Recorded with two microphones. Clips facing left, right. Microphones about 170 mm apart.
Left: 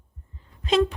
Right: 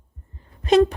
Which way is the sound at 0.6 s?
45° right (ahead or behind).